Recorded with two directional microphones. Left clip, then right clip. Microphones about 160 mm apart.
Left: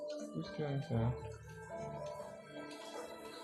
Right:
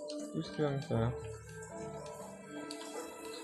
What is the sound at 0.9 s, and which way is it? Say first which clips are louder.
Speech: right 5 dB; 90° right.